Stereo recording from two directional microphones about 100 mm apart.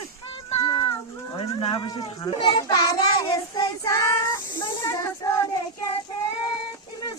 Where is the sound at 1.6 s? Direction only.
55° left (ahead or behind).